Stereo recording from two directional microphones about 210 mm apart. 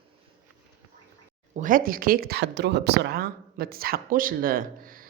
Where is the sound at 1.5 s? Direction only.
40° right (ahead or behind).